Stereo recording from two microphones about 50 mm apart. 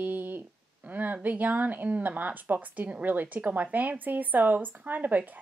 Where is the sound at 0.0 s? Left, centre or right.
Right.